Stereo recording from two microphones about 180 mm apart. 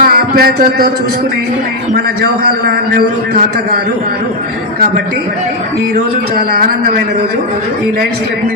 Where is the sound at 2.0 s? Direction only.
60° right (ahead or behind).